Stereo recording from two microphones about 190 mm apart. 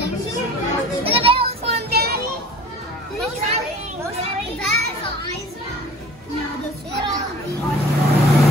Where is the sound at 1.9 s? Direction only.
55° right (ahead or behind).